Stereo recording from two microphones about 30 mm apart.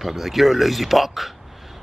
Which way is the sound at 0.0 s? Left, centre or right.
Centre.